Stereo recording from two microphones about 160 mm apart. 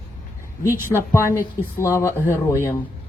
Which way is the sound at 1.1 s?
15° left (ahead or behind).